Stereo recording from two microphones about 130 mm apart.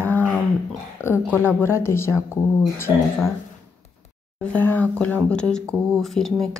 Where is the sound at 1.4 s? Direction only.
15° left (ahead or behind).